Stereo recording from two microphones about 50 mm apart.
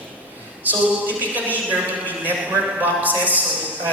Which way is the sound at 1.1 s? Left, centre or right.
Right.